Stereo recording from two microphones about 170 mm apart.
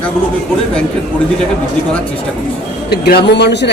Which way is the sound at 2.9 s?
70° left (ahead or behind).